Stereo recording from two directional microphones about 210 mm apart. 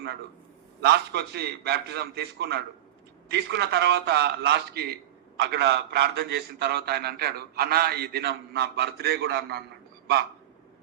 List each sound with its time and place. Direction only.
0.8 s a man's voice: 50° right (ahead or behind)